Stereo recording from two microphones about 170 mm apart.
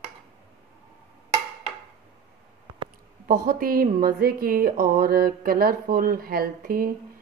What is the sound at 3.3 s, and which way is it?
A woman's voice, 55° right (ahead or behind).